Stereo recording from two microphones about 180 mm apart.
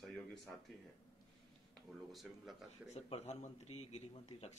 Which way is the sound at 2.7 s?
35° left (ahead or behind).